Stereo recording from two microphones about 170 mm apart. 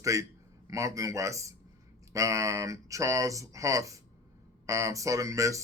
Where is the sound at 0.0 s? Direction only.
20° right (ahead or behind).